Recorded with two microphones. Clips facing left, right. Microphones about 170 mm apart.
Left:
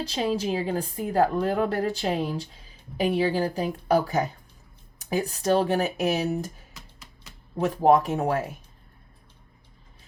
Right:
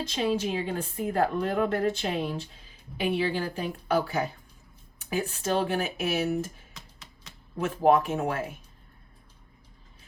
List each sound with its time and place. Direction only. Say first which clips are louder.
0.0 s a woman's voice: left 1 dB; 35° left (ahead or behind)
6.7 s music: left 1 dB; 5° left (ahead or behind)
7.6 s a woman's voice: left 3 dB; 35° left (ahead or behind)